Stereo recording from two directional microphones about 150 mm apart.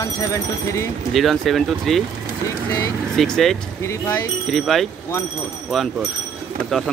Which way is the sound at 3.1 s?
Centre (ahead or behind).